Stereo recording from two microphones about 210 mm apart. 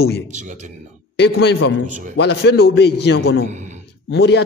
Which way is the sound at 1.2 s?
50° left (ahead or behind).